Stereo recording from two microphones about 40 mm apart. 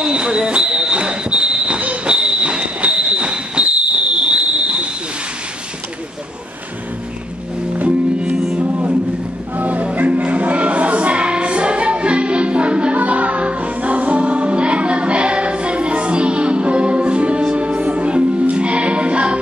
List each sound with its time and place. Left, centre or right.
0.0 s a sound: right
8.2 s music: right
9.6 s music: right